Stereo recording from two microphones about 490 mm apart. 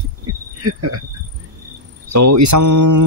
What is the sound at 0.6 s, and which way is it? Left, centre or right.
Cricket, right.